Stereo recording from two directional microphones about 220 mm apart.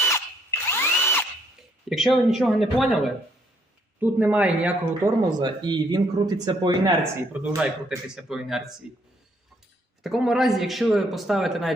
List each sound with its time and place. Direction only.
0.6 s drill: 10° left (ahead or behind)
1.9 s a man's voice: centre (ahead or behind)
4.0 s speech: 5° right (ahead or behind)
5.4 s a man's voice: 20° right (ahead or behind); by 11.7 s centre (ahead or behind)